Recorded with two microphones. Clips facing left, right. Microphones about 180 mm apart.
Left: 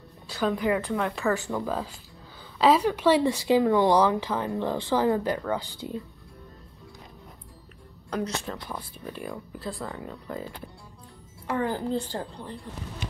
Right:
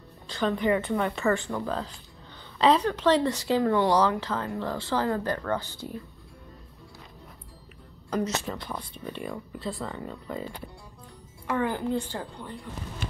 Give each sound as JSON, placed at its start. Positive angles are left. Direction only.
{"t": 0.3, "sound": "speech", "side_deg": 5}
{"t": 8.1, "sound": "speech", "side_deg": -5}
{"t": 11.4, "sound": "a child's voice", "side_deg": 35}